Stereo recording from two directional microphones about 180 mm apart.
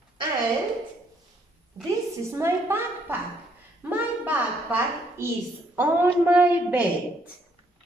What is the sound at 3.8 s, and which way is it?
A man's voice, 10° right (ahead or behind).